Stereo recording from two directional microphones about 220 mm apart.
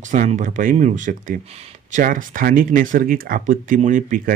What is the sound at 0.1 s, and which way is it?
Speech, 35° right (ahead or behind).